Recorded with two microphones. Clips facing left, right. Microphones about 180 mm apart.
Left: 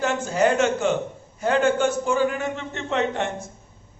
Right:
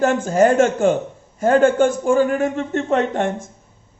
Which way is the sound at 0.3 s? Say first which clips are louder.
Right 4 dB; 45° right (ahead or behind).